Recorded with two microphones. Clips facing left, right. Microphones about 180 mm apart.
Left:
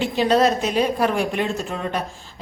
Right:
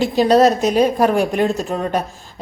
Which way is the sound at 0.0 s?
40° right (ahead or behind).